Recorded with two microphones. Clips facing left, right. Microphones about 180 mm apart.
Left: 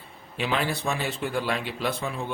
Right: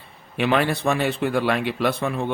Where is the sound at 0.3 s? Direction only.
65° right (ahead or behind).